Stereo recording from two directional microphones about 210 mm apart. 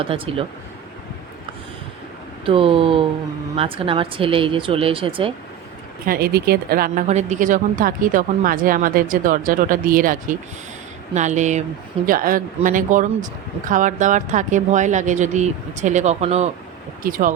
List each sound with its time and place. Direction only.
0.0 s speech: 25° right (ahead or behind)
2.4 s speech: 25° right (ahead or behind)
6.1 s speech: 45° right (ahead or behind); by 16.5 s 30° right (ahead or behind)
17.0 s speech: 40° right (ahead or behind)